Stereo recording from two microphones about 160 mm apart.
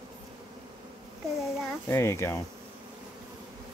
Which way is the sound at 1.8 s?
15° left (ahead or behind).